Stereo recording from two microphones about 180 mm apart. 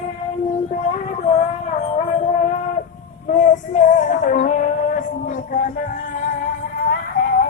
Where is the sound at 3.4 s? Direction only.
45° left (ahead or behind).